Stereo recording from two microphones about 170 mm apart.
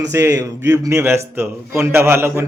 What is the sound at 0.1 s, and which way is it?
A man's voice, 20° right (ahead or behind).